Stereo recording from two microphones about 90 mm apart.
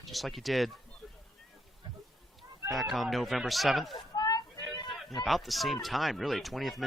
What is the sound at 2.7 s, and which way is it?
Speech, centre (ahead or behind).